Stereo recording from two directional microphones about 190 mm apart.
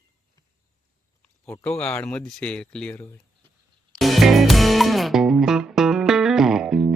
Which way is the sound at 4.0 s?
Centre (ahead or behind).